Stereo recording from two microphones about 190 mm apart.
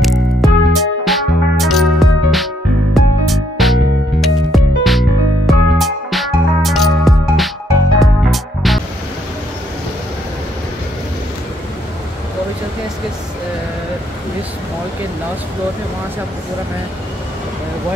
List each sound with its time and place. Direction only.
0.3 s music: centre (ahead or behind)